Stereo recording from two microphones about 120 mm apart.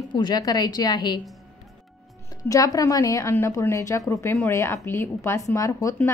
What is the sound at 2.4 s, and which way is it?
Speech, 30° left (ahead or behind).